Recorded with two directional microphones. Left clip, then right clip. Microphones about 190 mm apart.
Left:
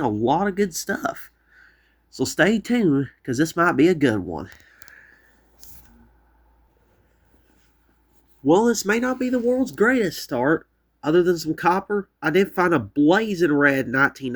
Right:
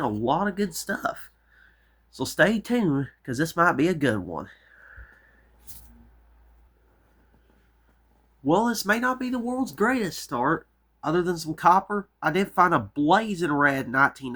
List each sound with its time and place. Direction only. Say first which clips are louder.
0.0 s speech: left 4 dB; 20° left (ahead or behind)
8.4 s speech: left 4 dB; 10° left (ahead or behind)